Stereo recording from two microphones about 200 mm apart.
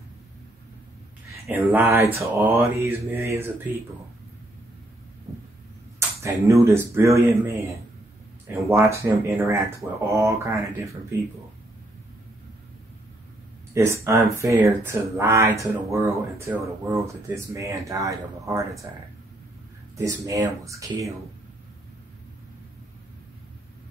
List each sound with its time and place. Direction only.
1.5 s speech: 10° right (ahead or behind)
5.9 s speech: 15° right (ahead or behind)
8.6 s speech: 15° right (ahead or behind)
13.7 s speech: 15° right (ahead or behind)
20.0 s speech: 15° right (ahead or behind)